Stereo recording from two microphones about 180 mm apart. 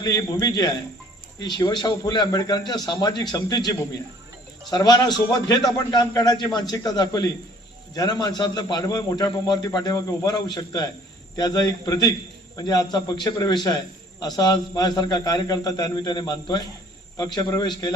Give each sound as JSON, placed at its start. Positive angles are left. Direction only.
{"t": 0.0, "sound": "a man's voice", "side_deg": 20}